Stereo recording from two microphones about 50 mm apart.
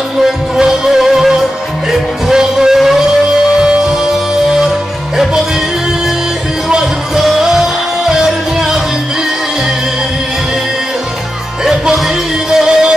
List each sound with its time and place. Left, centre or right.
0.2 s music: centre
6.7 s music: centre
11.6 s music: centre